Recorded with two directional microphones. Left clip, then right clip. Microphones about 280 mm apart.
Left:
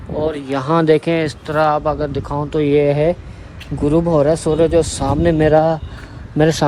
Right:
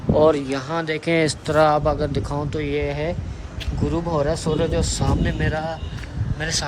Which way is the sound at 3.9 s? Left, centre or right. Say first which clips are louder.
Left 8 dB; left.